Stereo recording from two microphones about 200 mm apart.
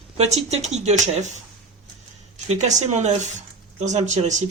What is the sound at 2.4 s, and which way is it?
Speech, 35° right (ahead or behind).